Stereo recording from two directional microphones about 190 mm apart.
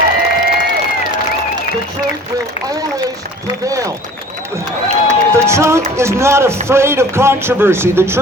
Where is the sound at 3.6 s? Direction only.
15° right (ahead or behind).